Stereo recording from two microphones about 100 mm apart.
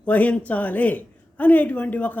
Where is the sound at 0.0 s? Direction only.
15° left (ahead or behind).